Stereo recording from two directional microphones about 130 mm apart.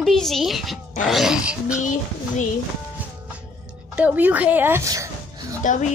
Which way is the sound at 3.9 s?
10° right (ahead or behind).